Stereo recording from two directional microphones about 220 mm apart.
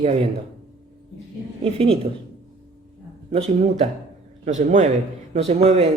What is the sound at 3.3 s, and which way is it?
A man's voice, 30° right (ahead or behind).